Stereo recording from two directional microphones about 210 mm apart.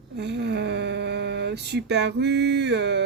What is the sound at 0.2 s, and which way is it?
Speech, 55° right (ahead or behind).